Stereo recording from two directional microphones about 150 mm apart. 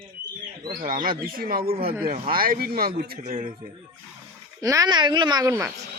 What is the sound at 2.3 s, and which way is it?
Speech, 75° right (ahead or behind).